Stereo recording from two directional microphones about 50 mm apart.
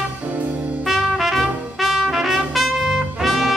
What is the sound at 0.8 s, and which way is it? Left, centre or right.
Brass instrument, centre.